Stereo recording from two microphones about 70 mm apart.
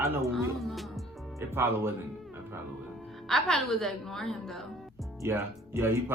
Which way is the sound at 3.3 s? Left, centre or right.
Centre.